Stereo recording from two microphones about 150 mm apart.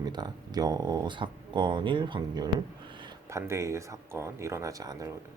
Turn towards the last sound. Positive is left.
turn(degrees=-25)  # may be behind; listen again after turning